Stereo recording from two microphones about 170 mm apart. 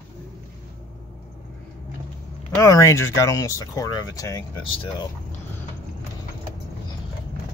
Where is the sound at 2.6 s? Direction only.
15° left (ahead or behind).